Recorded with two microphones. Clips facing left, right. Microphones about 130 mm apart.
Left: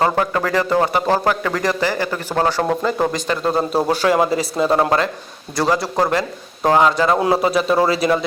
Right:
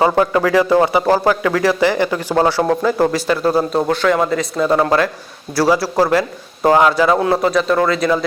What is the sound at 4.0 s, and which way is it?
Speech, 30° left (ahead or behind).